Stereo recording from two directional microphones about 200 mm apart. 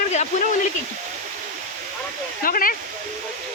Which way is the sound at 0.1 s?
35° left (ahead or behind).